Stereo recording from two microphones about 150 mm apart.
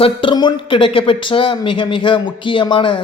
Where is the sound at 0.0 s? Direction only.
35° left (ahead or behind).